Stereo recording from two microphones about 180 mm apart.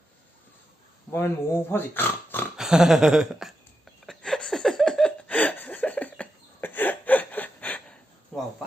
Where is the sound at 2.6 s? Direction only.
5° right (ahead or behind).